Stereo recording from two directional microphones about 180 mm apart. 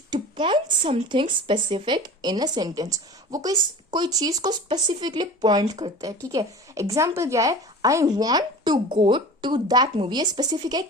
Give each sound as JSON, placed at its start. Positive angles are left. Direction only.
{"t": 0.1, "sound": "speech", "side_deg": -25}